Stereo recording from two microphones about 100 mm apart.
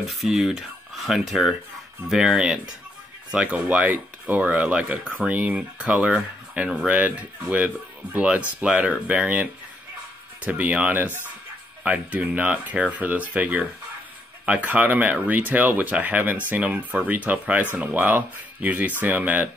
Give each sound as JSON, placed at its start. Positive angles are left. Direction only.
{"t": 0.0, "sound": "speech", "side_deg": 0}